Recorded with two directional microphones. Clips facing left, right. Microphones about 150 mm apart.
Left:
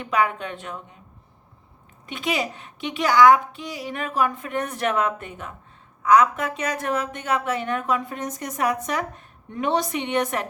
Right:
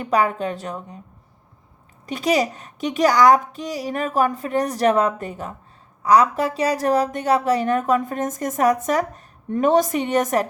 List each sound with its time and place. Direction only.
0.0 s speech: 35° right (ahead or behind)
2.0 s speech: 40° right (ahead or behind)